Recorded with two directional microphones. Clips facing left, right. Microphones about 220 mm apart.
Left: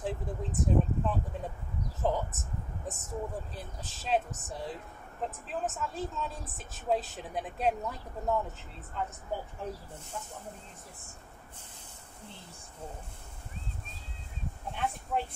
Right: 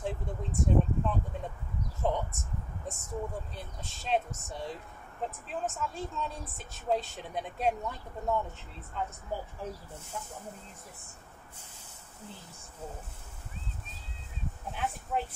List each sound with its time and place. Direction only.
0.0 s a sound: centre (ahead or behind)
2.9 s speech: centre (ahead or behind)
14.7 s speech: 5° right (ahead or behind)